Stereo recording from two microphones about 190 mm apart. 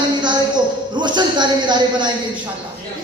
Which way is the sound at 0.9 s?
25° right (ahead or behind).